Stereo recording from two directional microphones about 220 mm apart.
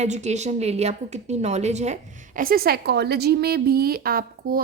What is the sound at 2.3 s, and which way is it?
A woman's voice, 40° right (ahead or behind).